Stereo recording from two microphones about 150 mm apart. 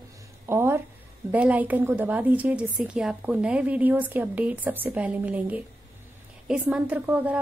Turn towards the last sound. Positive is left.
turn(degrees=-10)  # may be behind; listen again after turning